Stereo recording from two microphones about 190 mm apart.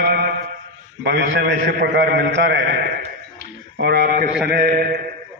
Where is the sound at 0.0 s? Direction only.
55° right (ahead or behind).